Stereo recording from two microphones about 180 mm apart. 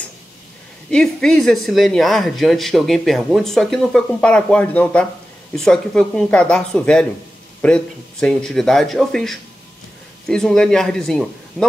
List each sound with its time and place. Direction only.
0.8 s speech: 5° left (ahead or behind)